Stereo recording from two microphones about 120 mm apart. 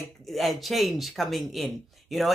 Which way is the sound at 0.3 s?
Centre (ahead or behind).